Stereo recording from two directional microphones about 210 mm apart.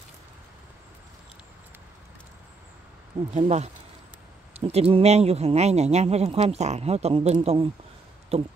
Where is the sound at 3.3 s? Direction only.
30° right (ahead or behind).